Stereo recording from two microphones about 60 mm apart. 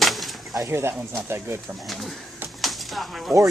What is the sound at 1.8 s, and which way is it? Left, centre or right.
Speech, centre.